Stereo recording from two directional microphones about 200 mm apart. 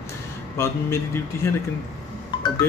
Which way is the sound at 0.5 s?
10° left (ahead or behind).